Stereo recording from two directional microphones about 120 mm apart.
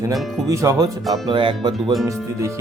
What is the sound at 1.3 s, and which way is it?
Speech, 40° right (ahead or behind).